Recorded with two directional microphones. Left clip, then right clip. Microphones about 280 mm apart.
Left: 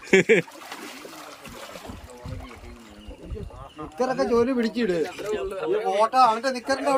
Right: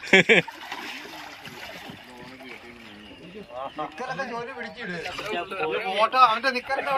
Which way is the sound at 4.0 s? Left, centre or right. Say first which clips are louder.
Left 13 dB; left.